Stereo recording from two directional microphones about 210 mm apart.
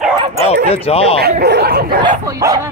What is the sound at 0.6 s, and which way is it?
Speech, 30° left (ahead or behind).